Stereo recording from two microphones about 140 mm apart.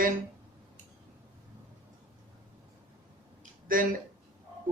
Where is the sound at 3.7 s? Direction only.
85° right.